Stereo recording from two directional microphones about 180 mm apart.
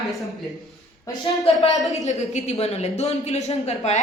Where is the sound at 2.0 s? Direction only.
40° left (ahead or behind).